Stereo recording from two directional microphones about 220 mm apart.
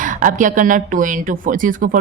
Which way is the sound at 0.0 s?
35° right (ahead or behind).